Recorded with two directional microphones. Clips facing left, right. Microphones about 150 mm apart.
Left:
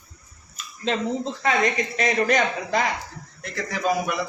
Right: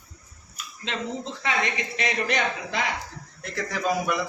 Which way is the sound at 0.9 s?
40° left (ahead or behind).